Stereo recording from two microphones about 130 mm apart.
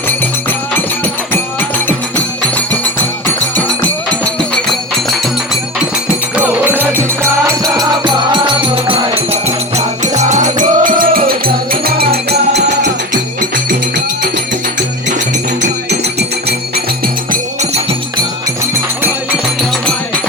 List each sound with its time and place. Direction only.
6.3 s music: 15° right (ahead or behind)
7.6 s music: 30° right (ahead or behind)
10.0 s music: 65° right (ahead or behind); by 11.2 s 90° right